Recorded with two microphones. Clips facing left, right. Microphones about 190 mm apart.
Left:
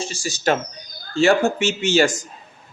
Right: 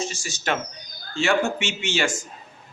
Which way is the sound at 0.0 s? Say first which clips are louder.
Left 6 dB; 35° left (ahead or behind).